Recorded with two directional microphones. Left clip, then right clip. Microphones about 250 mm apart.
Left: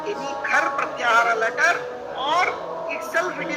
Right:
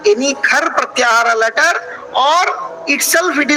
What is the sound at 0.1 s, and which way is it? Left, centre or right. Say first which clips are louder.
A man's voice: right 11 dB; right.